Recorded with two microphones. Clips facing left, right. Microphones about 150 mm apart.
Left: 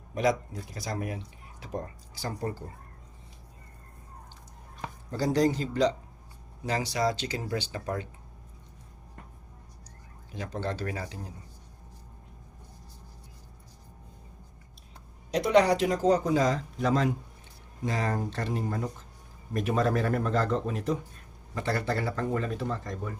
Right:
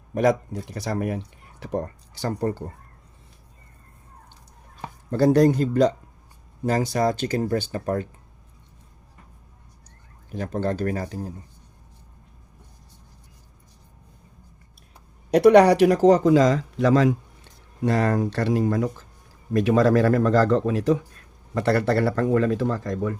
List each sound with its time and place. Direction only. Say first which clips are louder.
0.1 s speech: right 6 dB; 55° right (ahead or behind)
5.1 s speech: right 8 dB; 55° right (ahead or behind)
10.3 s speech: right 8 dB; 50° right (ahead or behind)
15.3 s speech: right 9 dB; 65° right (ahead or behind); by 17.2 s 90° right
17.8 s speech: right 9 dB; 65° right (ahead or behind); by 21.0 s 90° right
21.5 s speech: right 9 dB; 70° right (ahead or behind); by 23.1 s 90° right